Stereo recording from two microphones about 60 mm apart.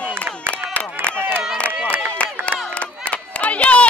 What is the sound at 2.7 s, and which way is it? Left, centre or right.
Run, left.